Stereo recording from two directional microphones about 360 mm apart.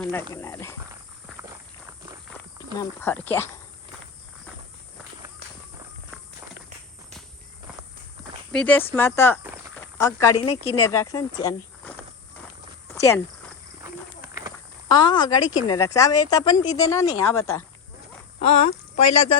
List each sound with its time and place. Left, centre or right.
0.0 s speech: centre
2.7 s speech: centre
8.5 s speech: centre
12.9 s a sound: centre
13.8 s a sound: centre
14.8 s speech: centre
19.0 s speech: left